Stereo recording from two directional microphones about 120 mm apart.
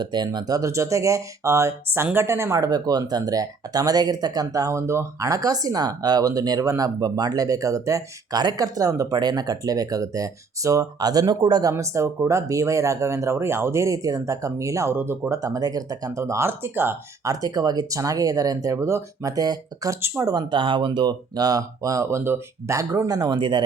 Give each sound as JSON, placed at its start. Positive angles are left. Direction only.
{"t": 0.0, "sound": "speech", "side_deg": -35}
{"t": 20.3, "sound": "speech", "side_deg": -45}